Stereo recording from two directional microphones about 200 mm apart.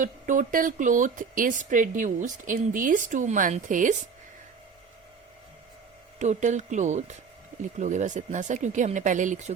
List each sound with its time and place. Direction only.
0.0 s a woman's voice: 40° right (ahead or behind)
6.1 s a woman's voice: 35° right (ahead or behind)